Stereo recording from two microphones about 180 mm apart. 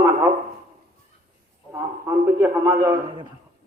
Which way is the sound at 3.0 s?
25° right (ahead or behind).